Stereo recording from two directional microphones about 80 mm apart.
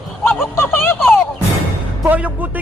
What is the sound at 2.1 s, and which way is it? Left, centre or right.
Speech, centre.